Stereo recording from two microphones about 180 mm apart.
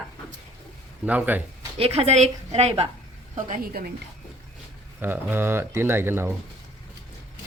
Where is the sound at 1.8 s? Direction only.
35° right (ahead or behind).